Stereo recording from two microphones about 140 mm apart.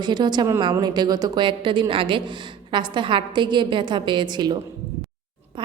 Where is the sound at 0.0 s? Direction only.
30° right (ahead or behind).